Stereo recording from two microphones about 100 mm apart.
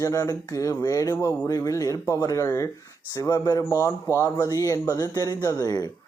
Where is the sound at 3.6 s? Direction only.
25° left (ahead or behind).